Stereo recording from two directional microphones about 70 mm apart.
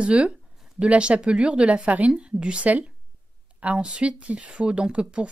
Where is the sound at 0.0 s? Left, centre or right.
Centre.